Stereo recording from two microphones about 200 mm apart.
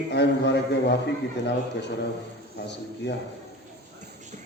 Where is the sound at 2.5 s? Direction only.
60° left (ahead or behind).